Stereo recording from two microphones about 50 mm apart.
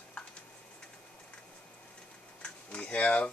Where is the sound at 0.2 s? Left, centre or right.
Centre.